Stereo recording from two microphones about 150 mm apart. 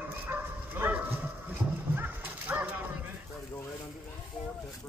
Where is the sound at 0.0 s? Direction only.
15° right (ahead or behind).